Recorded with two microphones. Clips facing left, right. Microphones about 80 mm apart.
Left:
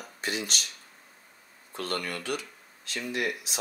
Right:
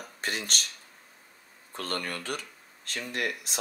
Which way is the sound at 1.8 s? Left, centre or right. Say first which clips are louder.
Left 1 dB; right.